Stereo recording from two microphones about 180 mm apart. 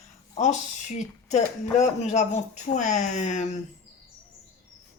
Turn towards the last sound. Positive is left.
turn(degrees=40)  # may be behind; listen again after turning